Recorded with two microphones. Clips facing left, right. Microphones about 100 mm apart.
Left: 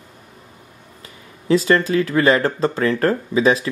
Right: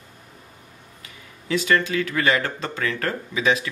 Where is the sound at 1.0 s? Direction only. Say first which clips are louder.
Left 11 dB; 35° left (ahead or behind).